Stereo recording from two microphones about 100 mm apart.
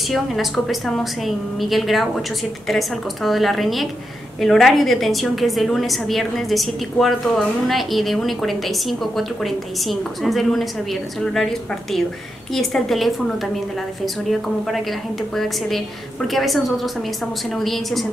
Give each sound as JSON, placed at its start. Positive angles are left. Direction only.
{"t": 0.1, "sound": "a woman's voice", "side_deg": 0}
{"t": 14.7, "sound": "a woman's voice", "side_deg": 0}